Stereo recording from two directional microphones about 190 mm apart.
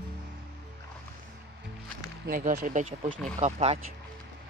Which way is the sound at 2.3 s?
45° right (ahead or behind).